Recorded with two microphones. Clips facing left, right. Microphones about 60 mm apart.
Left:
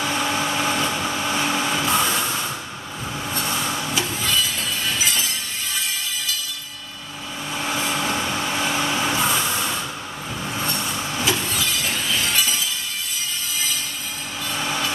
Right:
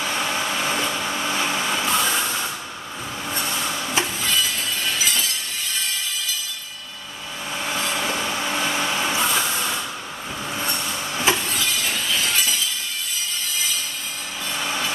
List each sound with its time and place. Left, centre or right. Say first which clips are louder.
0.0 s vehicle: left 2 dB; centre
3.4 s a sound: left 1 dB; centre
4.0 s music: even; centre
7.5 s vehicle: left 1 dB; centre
10.5 s train: left 1 dB; centre
11.4 s shatter: even; centre
14.5 s vehicle: left 1 dB; centre